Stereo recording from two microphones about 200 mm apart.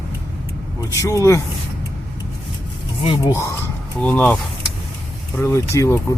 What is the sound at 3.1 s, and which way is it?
Speech, 15° left (ahead or behind).